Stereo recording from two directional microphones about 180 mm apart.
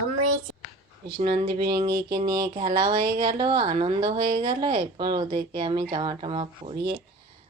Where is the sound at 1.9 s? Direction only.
60° right (ahead or behind).